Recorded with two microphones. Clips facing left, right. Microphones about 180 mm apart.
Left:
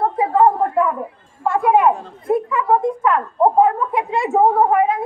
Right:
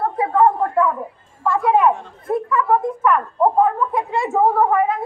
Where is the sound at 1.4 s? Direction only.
20° left (ahead or behind).